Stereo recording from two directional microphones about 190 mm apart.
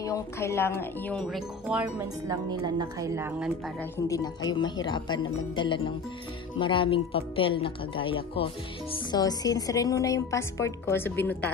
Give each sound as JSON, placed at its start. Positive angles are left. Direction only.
{"t": 0.0, "sound": "speech", "side_deg": 15}
{"t": 2.2, "sound": "speech", "side_deg": -20}
{"t": 4.1, "sound": "speech", "side_deg": 20}